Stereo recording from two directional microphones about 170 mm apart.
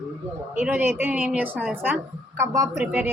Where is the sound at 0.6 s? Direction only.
10° right (ahead or behind).